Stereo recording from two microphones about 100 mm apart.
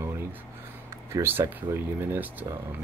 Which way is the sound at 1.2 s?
25° right (ahead or behind).